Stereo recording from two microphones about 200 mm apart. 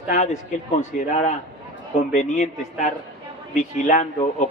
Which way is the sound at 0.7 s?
35° left (ahead or behind).